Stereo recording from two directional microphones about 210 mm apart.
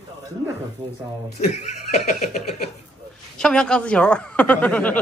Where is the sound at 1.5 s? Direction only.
35° left (ahead or behind).